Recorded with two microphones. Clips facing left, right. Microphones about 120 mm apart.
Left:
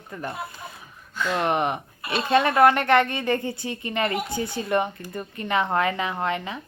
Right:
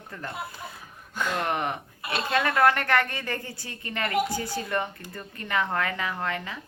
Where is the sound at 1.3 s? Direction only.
20° left (ahead or behind).